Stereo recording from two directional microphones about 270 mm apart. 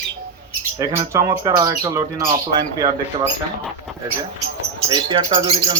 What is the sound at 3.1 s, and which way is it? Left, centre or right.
Speech, right.